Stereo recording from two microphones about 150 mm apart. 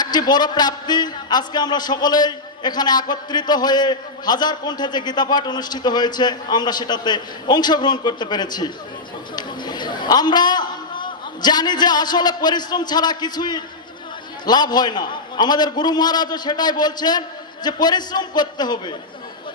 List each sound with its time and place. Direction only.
0.0 s a man's voice: 30° left (ahead or behind)